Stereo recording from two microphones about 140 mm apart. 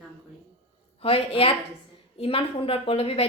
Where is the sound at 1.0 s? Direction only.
40° left (ahead or behind).